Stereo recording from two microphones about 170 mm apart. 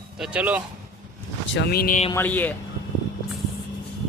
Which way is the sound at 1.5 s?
65° left (ahead or behind).